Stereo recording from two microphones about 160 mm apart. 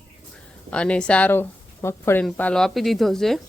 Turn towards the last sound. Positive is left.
turn(degrees=0)  # may be behind; listen again after turning